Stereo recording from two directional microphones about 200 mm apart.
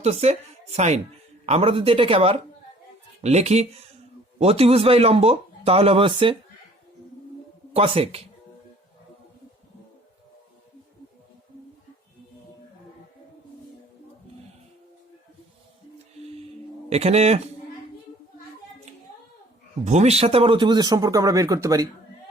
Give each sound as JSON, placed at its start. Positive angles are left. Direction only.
{"t": 0.0, "sound": "speech", "side_deg": -30}
{"t": 7.7, "sound": "speech", "side_deg": -30}
{"t": 16.9, "sound": "speech", "side_deg": -30}
{"t": 19.8, "sound": "speech", "side_deg": -35}